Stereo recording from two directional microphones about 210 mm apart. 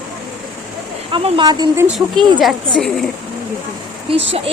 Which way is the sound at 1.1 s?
25° right (ahead or behind).